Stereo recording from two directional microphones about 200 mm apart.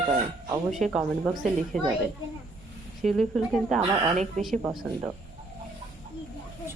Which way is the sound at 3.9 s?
30° right (ahead or behind).